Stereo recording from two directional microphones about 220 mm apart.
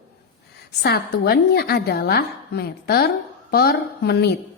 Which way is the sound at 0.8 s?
45° left (ahead or behind).